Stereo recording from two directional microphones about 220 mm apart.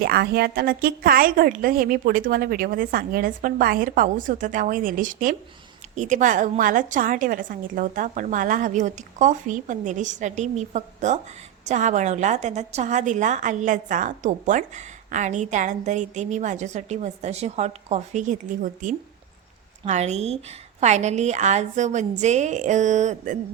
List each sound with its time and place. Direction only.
0.0 s a woman's voice: 45° right (ahead or behind)